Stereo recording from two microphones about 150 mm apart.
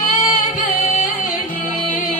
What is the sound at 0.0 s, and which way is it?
Music, 60° left (ahead or behind).